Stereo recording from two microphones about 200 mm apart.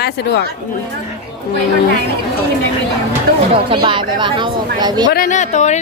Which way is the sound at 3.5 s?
25° right (ahead or behind).